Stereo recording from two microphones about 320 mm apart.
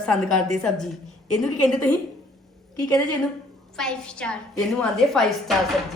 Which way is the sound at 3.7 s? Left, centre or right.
Centre.